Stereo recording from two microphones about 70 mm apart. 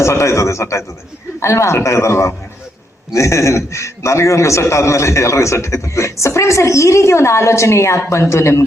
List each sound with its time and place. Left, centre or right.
0.0 s a man's voice: left